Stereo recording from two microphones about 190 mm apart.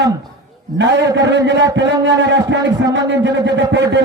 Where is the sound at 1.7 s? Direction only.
70° right (ahead or behind).